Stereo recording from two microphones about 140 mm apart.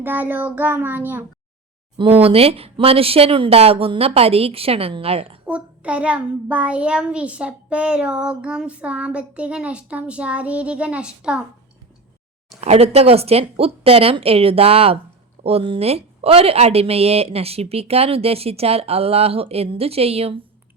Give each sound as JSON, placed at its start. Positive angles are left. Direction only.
{"t": 0.0, "sound": "a child's voice", "side_deg": -15}
{"t": 2.2, "sound": "a woman's voice", "side_deg": -45}
{"t": 5.5, "sound": "a child's voice", "side_deg": -10}
{"t": 12.5, "sound": "a woman's voice", "side_deg": -50}